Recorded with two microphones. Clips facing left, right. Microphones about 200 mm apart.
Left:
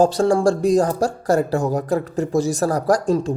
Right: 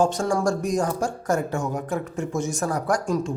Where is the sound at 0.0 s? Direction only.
35° left (ahead or behind).